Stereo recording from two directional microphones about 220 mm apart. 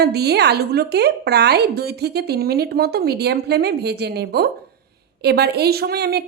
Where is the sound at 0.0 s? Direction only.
45° right (ahead or behind).